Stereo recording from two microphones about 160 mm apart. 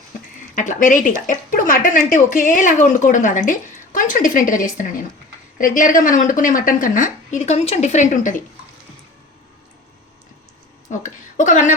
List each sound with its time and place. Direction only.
0.5 s a woman's voice: 55° left (ahead or behind)
10.8 s speech: 55° left (ahead or behind)